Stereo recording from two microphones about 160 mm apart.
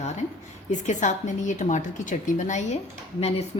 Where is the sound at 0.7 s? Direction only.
50° left (ahead or behind).